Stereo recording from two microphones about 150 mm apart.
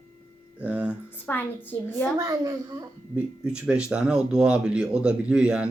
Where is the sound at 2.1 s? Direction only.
25° right (ahead or behind).